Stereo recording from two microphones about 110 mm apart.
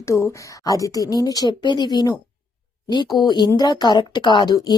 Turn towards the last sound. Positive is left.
turn(degrees=40)  # may be behind; listen again after turning